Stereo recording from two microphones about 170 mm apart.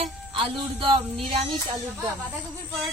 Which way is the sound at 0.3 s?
35° right (ahead or behind).